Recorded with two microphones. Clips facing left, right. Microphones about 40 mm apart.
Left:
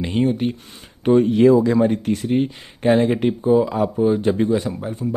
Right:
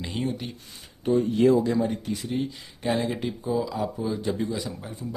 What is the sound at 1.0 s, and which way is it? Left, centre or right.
Speech, left.